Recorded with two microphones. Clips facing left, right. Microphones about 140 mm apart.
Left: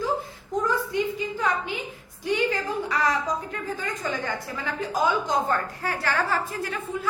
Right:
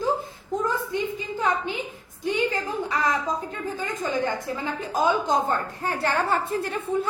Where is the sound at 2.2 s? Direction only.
25° right (ahead or behind).